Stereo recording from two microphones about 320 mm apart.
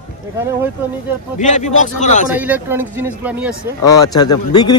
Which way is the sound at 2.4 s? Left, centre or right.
Centre.